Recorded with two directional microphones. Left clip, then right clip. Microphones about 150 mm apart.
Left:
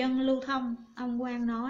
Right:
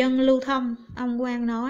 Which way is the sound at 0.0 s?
40° right (ahead or behind).